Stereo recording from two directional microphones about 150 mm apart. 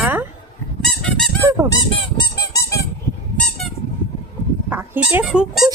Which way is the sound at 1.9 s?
30° left (ahead or behind).